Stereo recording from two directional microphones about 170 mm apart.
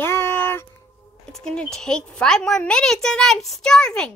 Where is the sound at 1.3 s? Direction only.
5° left (ahead or behind).